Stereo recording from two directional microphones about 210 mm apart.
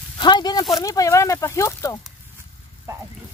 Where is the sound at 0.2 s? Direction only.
20° left (ahead or behind).